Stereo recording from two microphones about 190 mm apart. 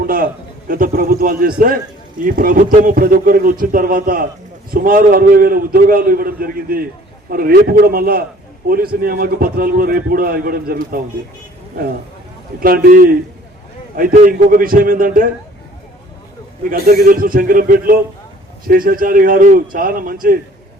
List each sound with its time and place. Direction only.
0.0 s a sound: 50° right (ahead or behind)
0.7 s a man's voice: 50° right (ahead or behind)
12.5 s a man's voice: 50° right (ahead or behind)
16.6 s a man's voice: 50° right (ahead or behind)